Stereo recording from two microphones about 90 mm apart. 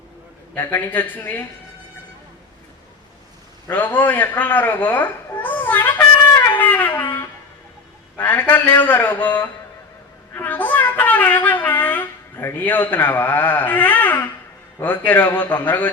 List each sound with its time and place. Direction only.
0.5 s a man's voice: 20° left (ahead or behind)
3.7 s speech: 20° left (ahead or behind)
6.6 s wind instrument: 20° left (ahead or behind)
8.1 s a man's voice: 20° left (ahead or behind)
10.3 s a sound: 20° left (ahead or behind)
14.8 s a man's voice: 20° left (ahead or behind)